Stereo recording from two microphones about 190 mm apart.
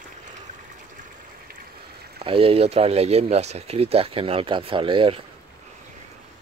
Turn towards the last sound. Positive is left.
turn(degrees=-25)  # may be behind; listen again after turning